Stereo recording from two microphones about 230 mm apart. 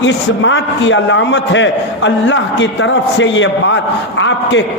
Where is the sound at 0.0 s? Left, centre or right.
Left.